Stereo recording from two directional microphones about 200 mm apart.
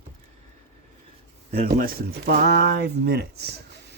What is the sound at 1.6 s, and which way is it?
A man's voice, 40° right (ahead or behind).